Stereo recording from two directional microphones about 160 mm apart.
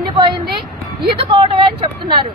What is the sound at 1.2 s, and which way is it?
Speech, 35° right (ahead or behind).